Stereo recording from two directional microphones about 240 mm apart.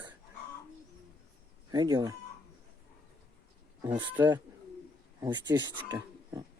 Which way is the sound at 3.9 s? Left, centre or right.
Centre.